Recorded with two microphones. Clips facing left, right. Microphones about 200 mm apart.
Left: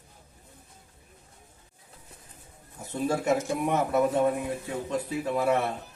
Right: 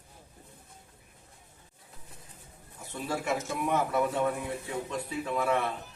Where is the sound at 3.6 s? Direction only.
40° left (ahead or behind).